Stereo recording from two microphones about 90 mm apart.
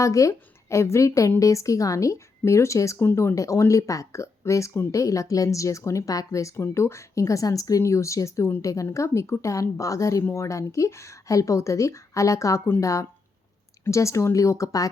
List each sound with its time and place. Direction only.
0.0 s a woman's voice: 35° left (ahead or behind)